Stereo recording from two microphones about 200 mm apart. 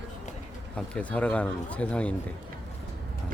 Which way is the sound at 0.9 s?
5° left (ahead or behind).